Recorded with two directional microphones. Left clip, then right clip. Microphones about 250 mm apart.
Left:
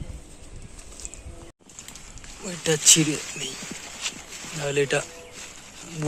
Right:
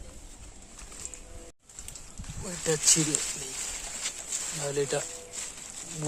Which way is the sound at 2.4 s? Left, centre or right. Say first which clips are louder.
Left 6 dB; centre.